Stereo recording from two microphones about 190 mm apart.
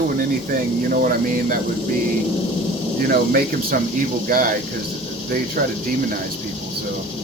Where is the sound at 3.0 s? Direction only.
50° right (ahead or behind).